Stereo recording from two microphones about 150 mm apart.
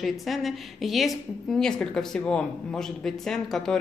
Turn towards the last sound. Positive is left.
turn(degrees=5)  # may be behind; listen again after turning